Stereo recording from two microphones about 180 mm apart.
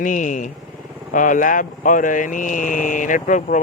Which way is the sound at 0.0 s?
45° left (ahead or behind).